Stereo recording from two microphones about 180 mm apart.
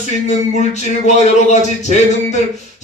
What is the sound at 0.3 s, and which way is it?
Speech, 40° left (ahead or behind).